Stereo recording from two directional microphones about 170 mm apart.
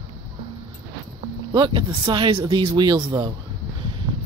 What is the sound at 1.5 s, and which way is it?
Speech, 30° right (ahead or behind).